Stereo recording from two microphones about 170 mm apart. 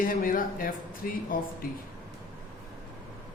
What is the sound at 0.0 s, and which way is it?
Speech, 55° left (ahead or behind).